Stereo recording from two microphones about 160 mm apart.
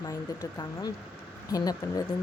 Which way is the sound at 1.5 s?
20° left (ahead or behind).